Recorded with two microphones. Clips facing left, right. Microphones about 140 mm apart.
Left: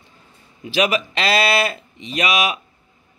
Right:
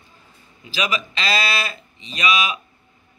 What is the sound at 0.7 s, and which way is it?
A man's voice, 60° left (ahead or behind).